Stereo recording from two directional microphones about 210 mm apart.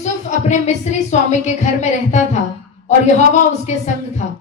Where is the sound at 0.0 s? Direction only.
35° left (ahead or behind).